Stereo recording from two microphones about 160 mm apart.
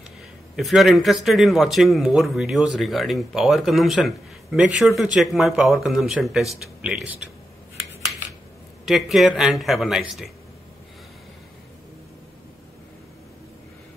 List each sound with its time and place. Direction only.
0.6 s speech: centre (ahead or behind)
8.8 s speech: centre (ahead or behind)